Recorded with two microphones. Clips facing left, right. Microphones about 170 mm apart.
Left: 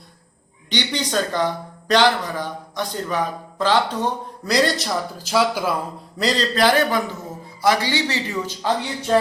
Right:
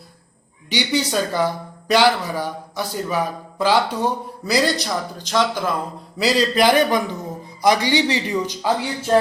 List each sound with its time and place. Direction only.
0.7 s speech: 10° right (ahead or behind); by 5.7 s 10° left (ahead or behind)
6.1 s speech: 10° right (ahead or behind)